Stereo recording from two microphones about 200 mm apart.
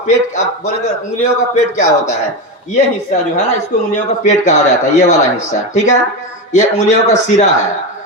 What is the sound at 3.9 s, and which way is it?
Speech, 35° left (ahead or behind).